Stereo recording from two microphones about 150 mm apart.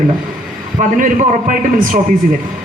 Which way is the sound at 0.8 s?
60° right (ahead or behind).